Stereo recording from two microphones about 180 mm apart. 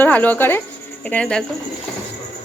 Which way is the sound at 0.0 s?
10° left (ahead or behind).